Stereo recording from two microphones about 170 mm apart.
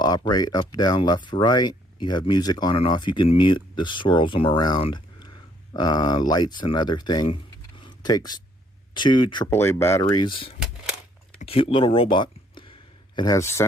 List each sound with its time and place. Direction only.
0.3 s speech: 25° left (ahead or behind)
7.8 s a sound: 25° left (ahead or behind)
8.9 s speech: 25° left (ahead or behind)
9.5 s speech: 15° left (ahead or behind)